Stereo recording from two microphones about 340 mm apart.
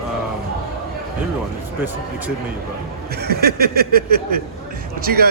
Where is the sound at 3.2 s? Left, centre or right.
Right.